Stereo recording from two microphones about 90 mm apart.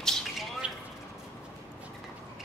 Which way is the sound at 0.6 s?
10° right (ahead or behind).